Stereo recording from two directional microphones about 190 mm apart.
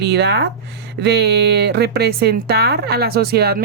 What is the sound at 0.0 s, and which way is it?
Speech, 60° right (ahead or behind).